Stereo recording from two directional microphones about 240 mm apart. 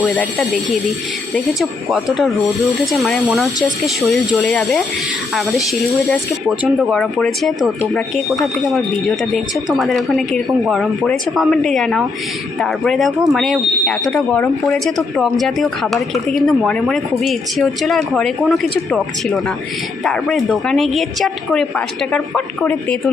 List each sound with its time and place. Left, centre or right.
0.2 s speech: centre
1.9 s speech: centre
6.7 s speech: centre
20.1 s speech: centre